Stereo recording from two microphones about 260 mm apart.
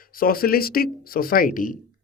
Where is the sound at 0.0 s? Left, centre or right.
Left.